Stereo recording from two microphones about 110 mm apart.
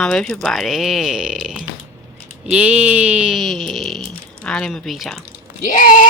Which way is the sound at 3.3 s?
Centre (ahead or behind).